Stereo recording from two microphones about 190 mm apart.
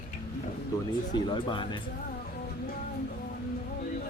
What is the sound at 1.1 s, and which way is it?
Speech, 25° left (ahead or behind).